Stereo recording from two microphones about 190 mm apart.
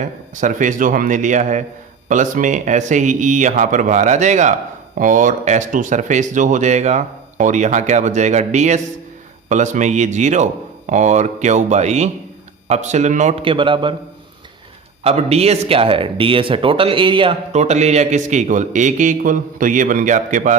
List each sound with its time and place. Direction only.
0.0 s speech: 40° right (ahead or behind)
13.5 s a man's voice: 25° right (ahead or behind)
15.0 s speech: 35° right (ahead or behind)